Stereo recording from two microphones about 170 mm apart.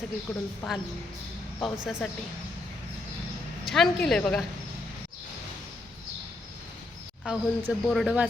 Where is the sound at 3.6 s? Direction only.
Centre (ahead or behind).